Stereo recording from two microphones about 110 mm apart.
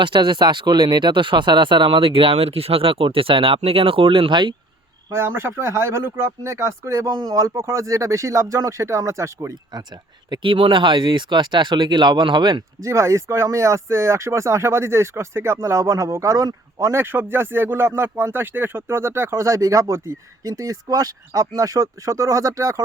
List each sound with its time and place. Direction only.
0.0 s speech: 45° right (ahead or behind)
5.1 s speech: 20° right (ahead or behind)
7.1 s speech: 40° right (ahead or behind)
7.3 s speech: 25° right (ahead or behind)
10.2 s speech: 45° right (ahead or behind)
12.8 s speech: 25° right (ahead or behind)